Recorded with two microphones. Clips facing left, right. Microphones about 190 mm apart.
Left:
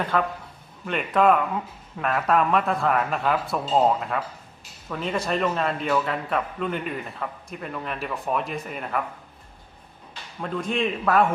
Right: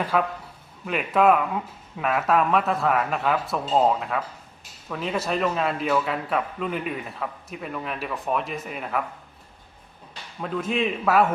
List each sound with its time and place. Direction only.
0.0 s a man's voice: 5° right (ahead or behind)
10.4 s a man's voice: 5° right (ahead or behind)